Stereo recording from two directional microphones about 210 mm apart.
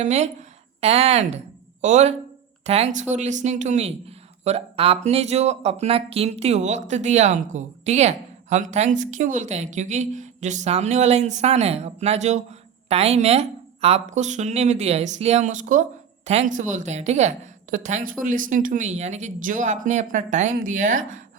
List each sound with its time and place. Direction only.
0.0 s a woman's voice: 35° right (ahead or behind)